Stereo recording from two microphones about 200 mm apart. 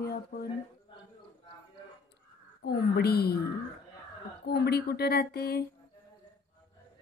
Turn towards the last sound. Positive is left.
turn(degrees=50)  # may be behind; listen again after turning